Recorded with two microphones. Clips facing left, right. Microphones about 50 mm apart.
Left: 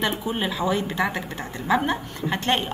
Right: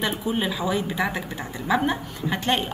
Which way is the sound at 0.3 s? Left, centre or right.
Centre.